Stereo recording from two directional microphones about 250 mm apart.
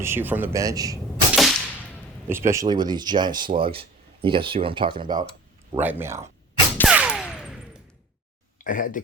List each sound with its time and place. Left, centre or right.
0.0 s speech: centre
1.4 s whip: centre
2.3 s speech: centre
5.7 s speech: centre
6.7 s a sound: centre
8.5 s speech: left